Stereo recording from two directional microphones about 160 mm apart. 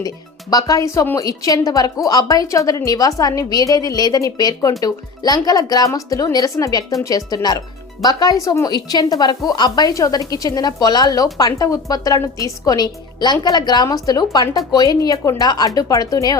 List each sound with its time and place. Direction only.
0.5 s a woman's voice: 20° left (ahead or behind)